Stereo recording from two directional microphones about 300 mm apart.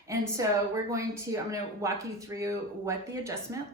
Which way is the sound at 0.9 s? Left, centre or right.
Centre.